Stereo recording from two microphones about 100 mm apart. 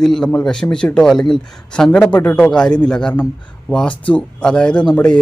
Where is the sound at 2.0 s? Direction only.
20° left (ahead or behind).